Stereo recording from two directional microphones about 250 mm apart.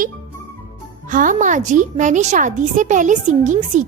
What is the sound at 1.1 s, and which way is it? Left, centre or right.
A woman's voice, right.